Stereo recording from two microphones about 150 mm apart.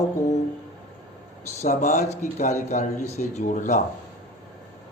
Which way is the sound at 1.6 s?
50° left (ahead or behind).